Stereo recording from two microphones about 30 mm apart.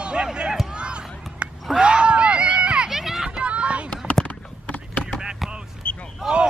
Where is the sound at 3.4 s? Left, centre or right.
Right.